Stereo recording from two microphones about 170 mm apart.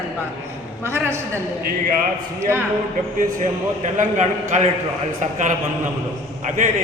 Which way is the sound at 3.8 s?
45° right (ahead or behind).